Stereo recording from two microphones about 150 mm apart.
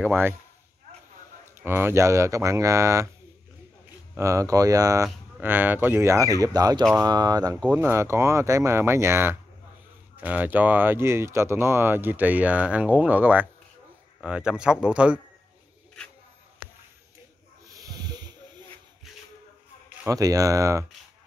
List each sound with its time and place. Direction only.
0.0 s speech: 15° right (ahead or behind)
1.6 s speech: 15° right (ahead or behind)
4.2 s speech: 20° right (ahead or behind)
5.0 s speech: 10° right (ahead or behind)
7.7 s speech: 15° right (ahead or behind)
17.8 s snake: 25° right (ahead or behind)
20.1 s speech: 25° right (ahead or behind)